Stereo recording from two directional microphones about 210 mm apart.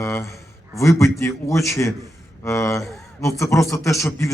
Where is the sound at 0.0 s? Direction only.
15° left (ahead or behind).